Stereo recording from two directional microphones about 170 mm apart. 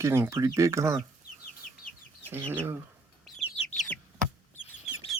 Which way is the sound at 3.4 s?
40° left (ahead or behind).